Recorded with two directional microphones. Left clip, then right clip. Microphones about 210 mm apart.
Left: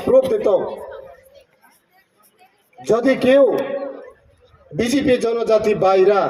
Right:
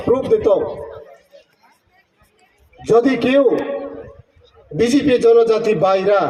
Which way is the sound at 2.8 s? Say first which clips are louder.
Right 4 dB; 35° left (ahead or behind).